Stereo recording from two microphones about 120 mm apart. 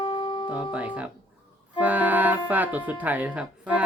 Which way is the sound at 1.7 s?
15° right (ahead or behind).